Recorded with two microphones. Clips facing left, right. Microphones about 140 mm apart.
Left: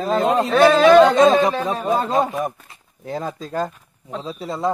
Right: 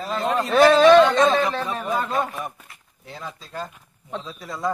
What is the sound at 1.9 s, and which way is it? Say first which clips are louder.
Speech: left 6 dB; 35° left (ahead or behind).